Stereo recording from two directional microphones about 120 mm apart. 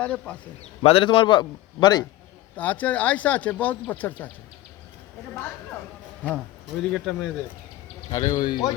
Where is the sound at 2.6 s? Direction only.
15° left (ahead or behind).